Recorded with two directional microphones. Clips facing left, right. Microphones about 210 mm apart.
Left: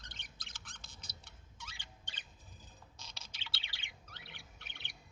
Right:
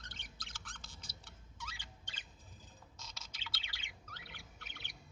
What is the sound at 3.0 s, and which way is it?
Bird, 30° left (ahead or behind).